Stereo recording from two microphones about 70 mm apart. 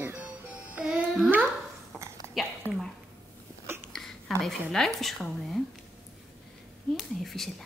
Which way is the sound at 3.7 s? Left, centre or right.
Right.